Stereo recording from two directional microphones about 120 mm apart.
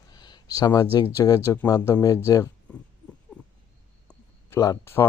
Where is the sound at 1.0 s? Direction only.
30° left (ahead or behind).